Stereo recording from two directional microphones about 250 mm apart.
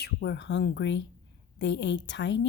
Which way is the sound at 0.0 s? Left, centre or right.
Left.